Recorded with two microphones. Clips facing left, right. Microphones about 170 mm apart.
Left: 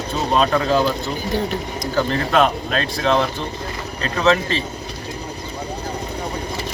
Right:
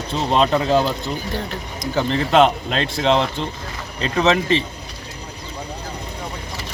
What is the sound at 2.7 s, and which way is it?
Speech, 20° right (ahead or behind).